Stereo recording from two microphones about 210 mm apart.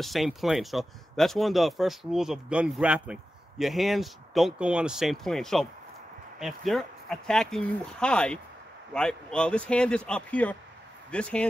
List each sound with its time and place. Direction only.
0.0 s speech: centre (ahead or behind)